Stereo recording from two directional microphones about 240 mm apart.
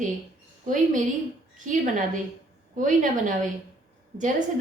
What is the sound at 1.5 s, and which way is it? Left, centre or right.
A woman's voice, right.